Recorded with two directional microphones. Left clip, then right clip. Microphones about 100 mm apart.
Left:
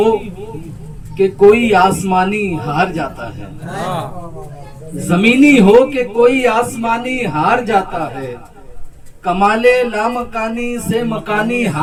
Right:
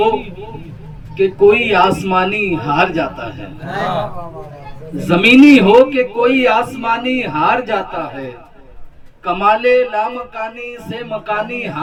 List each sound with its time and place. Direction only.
0.0 s a man's voice: 30° right (ahead or behind)
4.9 s a man's voice: 30° right (ahead or behind)